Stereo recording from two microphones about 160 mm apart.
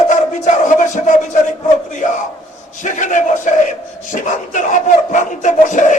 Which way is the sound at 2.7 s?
55° left (ahead or behind).